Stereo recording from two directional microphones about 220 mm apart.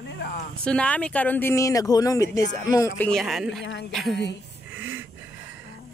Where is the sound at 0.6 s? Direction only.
5° left (ahead or behind).